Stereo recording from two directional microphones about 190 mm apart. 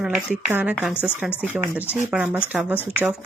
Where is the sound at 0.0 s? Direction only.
Centre (ahead or behind).